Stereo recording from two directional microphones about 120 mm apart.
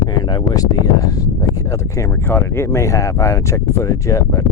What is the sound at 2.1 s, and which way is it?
Speech, 15° left (ahead or behind).